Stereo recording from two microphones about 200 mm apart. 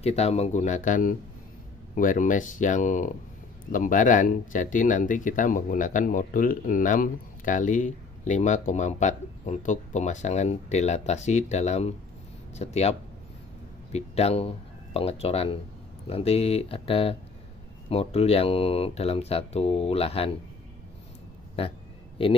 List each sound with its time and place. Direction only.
0.0 s speech: 30° left (ahead or behind)
13.9 s speech: 30° left (ahead or behind)
21.6 s speech: 30° left (ahead or behind)